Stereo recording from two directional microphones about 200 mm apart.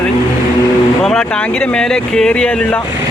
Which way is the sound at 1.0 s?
5° left (ahead or behind).